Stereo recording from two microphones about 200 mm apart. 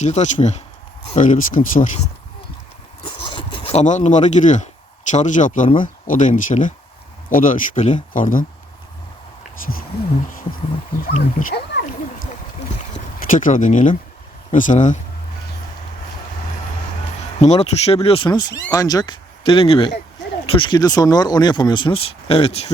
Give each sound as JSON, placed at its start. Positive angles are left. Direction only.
{"t": 0.0, "sound": "speech", "side_deg": 35}
{"t": 3.2, "sound": "speech", "side_deg": 25}
{"t": 11.0, "sound": "speech", "side_deg": 40}
{"t": 13.1, "sound": "speech", "side_deg": 40}
{"t": 17.4, "sound": "speech", "side_deg": 30}